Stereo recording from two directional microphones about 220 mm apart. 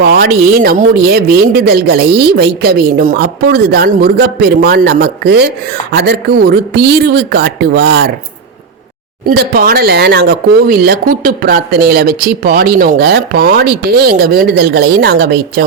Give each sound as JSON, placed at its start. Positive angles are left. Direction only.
{"t": 0.0, "sound": "speech", "side_deg": -45}
{"t": 9.2, "sound": "speech", "side_deg": -45}